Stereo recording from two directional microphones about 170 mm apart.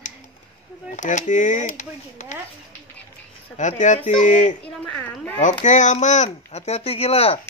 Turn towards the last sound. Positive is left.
turn(degrees=35)  # may be behind; listen again after turning